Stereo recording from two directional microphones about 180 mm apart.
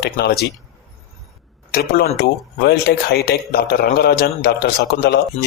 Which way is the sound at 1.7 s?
60° left (ahead or behind).